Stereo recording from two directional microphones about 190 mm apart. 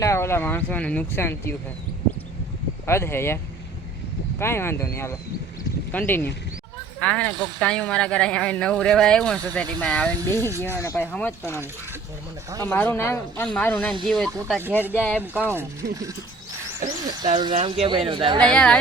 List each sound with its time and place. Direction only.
0.0 s speech: 15° left (ahead or behind)
2.8 s speech: 15° left (ahead or behind)
4.4 s speech: 15° left (ahead or behind)
12.6 s speech: 10° left (ahead or behind)
15.2 s speech: 10° right (ahead or behind)
16.8 s speech: 30° right (ahead or behind)
18.3 s speech: 5° left (ahead or behind)